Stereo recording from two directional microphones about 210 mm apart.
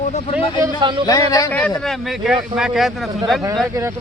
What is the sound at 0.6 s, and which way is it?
Speech, 20° right (ahead or behind).